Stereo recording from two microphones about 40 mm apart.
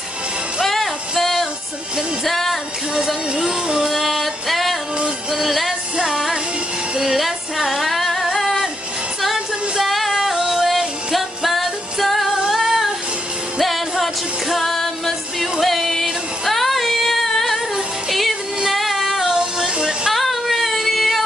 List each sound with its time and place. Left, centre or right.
0.7 s music: centre
3.3 s music: centre
3.9 s music: centre
7.0 s female singing: centre
8.4 s music: centre
12.4 s female singing: centre
13.6 s music: centre
15.6 s female singing: centre
18.7 s music: centre
19.2 s music: centre
20.1 s child singing: centre